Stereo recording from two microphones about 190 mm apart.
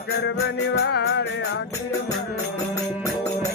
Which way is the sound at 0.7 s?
65° left (ahead or behind).